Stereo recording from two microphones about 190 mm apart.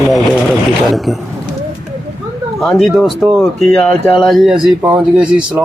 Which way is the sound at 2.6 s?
Centre (ahead or behind).